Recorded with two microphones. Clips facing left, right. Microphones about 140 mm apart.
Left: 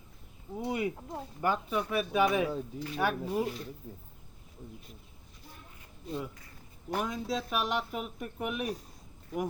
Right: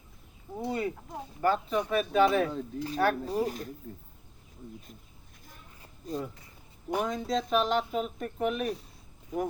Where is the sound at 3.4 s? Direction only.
45° right (ahead or behind).